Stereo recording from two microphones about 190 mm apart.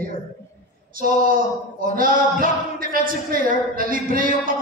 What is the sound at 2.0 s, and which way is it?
A man's voice, 45° right (ahead or behind).